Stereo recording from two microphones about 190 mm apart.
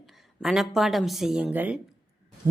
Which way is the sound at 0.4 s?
Centre (ahead or behind).